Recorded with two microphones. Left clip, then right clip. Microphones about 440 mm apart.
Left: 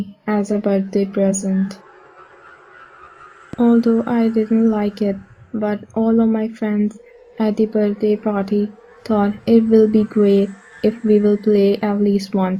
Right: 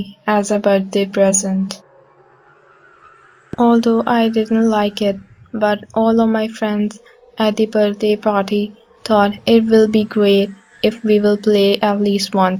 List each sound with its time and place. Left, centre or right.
0.3 s speech: centre
3.6 s speech: centre